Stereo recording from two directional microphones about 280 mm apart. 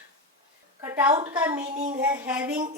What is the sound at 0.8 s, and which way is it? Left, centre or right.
A woman's voice, centre.